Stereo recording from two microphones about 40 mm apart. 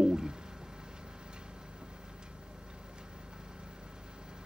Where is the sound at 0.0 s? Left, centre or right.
Centre.